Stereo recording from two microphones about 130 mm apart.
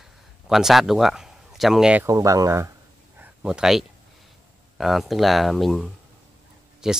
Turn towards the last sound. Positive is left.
turn(degrees=-5)  # may be behind; listen again after turning